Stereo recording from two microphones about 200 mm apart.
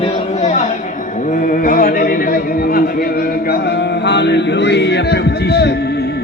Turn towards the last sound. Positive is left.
turn(degrees=55)  # may be behind; listen again after turning